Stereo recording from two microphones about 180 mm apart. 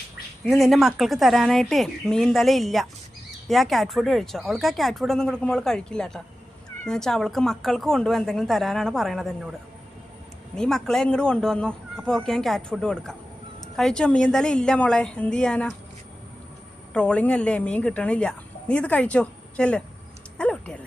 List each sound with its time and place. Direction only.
0.4 s speech: centre (ahead or behind)
16.9 s a woman's voice: 5° left (ahead or behind)